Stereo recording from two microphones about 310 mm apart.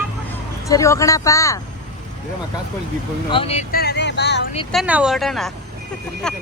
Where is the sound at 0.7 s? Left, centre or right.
Centre.